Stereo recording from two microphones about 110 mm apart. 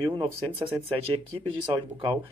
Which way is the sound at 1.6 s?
50° right (ahead or behind).